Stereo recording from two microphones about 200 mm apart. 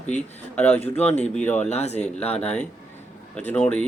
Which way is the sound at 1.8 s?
35° left (ahead or behind).